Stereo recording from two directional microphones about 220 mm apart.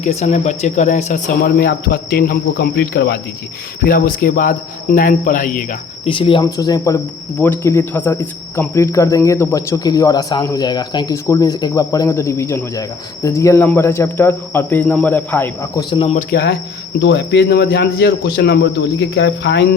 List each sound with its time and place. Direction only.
0.0 s speech: 30° left (ahead or behind)
1.5 s speech: 45° left (ahead or behind)
6.1 s speech: 25° left (ahead or behind)
16.3 s speech: 45° left (ahead or behind)